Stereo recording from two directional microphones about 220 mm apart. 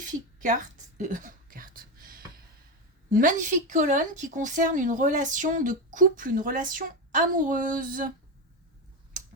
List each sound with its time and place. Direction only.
0.4 s whispering: 35° right (ahead or behind)
3.1 s speech: 35° right (ahead or behind)